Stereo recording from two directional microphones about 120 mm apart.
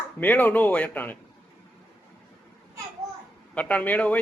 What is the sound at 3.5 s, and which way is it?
Speech, 10° left (ahead or behind).